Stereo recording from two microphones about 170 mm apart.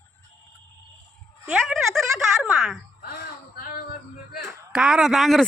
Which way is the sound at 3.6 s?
60° left (ahead or behind).